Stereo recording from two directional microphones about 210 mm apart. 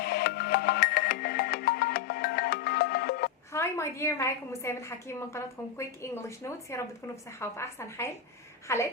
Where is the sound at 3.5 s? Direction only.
15° left (ahead or behind).